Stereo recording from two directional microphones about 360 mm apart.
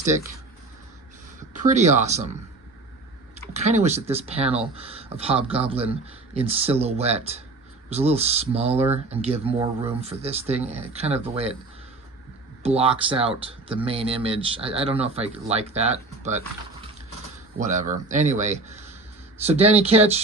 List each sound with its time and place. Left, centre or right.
1.6 s speech: centre
3.5 s speech: centre
12.6 s speech: centre
17.6 s speech: right